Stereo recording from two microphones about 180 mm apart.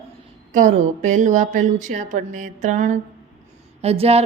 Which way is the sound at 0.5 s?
45° right (ahead or behind).